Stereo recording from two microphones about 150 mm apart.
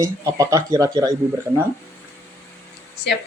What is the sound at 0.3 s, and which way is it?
Speech, 20° right (ahead or behind).